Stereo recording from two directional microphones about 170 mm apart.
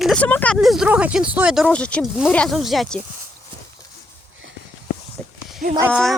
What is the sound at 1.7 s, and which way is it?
Speech, 5° left (ahead or behind).